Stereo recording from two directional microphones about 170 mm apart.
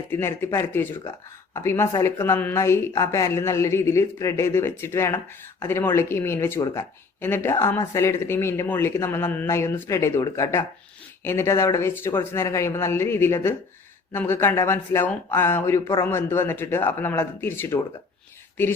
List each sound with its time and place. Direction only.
0.1 s speech: 15° left (ahead or behind)